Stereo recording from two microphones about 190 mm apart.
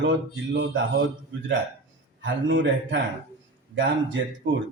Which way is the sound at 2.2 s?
85° right.